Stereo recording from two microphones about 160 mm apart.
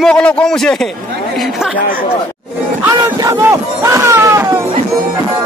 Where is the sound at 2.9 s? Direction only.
20° right (ahead or behind).